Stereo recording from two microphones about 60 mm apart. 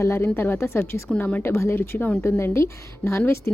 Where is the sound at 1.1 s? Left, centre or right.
Left.